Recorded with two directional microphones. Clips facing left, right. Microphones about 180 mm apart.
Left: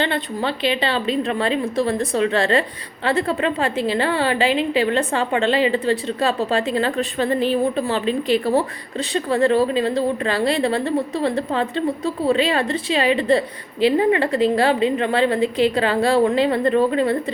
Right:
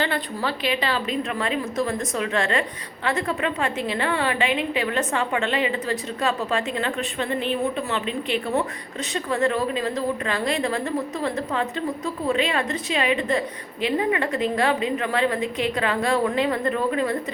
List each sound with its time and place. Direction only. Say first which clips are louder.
0.0 s a woman's voice: left 3 dB; 25° left (ahead or behind)